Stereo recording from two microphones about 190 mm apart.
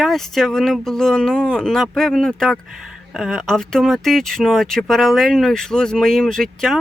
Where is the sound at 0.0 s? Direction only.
Centre (ahead or behind).